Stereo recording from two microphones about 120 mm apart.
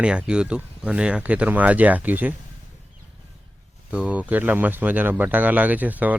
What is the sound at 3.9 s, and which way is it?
Speech, 10° right (ahead or behind).